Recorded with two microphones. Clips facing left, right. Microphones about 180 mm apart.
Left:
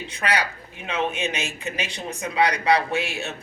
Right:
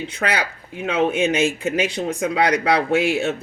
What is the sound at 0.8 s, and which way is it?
Speech, 90° right.